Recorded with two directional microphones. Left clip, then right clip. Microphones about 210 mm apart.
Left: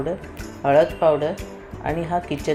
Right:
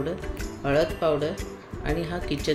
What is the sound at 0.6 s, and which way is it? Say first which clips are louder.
Speech: left 7 dB; centre (ahead or behind).